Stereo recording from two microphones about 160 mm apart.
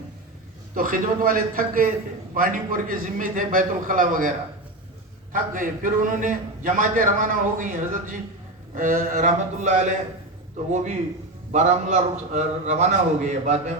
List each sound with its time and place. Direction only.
0.7 s a man's voice: 60° right (ahead or behind)